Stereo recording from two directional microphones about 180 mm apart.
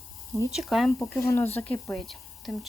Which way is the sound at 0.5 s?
Centre (ahead or behind).